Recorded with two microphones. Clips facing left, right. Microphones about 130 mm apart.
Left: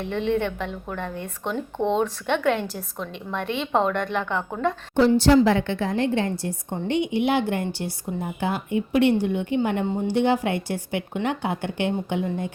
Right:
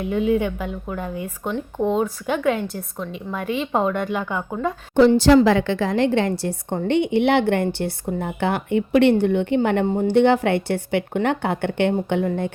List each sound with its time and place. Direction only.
0.0 s a woman's voice: 5° right (ahead or behind)
4.9 s a woman's voice: 90° right; by 12.5 s 60° right (ahead or behind)